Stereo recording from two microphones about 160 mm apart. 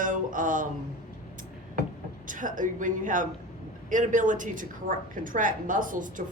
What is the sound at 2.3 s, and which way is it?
A woman's voice, 55° right (ahead or behind).